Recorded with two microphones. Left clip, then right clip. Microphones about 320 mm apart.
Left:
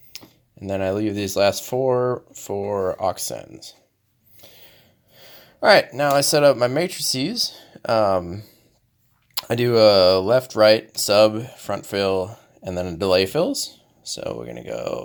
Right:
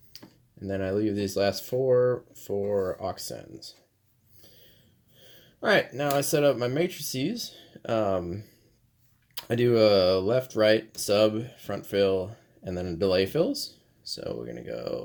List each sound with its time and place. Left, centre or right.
0.6 s speech: centre
4.4 s a sound: left
5.1 s speech: left